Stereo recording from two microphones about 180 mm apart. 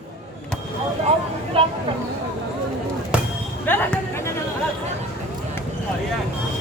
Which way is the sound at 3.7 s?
10° left (ahead or behind).